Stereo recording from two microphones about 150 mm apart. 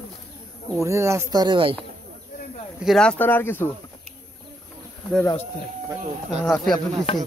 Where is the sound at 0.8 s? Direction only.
20° right (ahead or behind).